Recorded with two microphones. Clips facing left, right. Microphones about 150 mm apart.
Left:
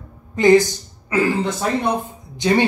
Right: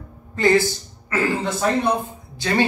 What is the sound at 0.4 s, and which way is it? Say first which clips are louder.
Speech: left 4 dB; 15° left (ahead or behind).